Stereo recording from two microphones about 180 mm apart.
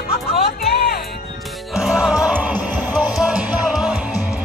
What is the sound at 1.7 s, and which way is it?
Music, 5° right (ahead or behind).